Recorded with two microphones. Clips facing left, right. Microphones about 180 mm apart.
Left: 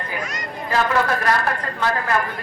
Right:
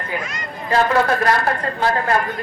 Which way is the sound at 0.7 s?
35° right (ahead or behind).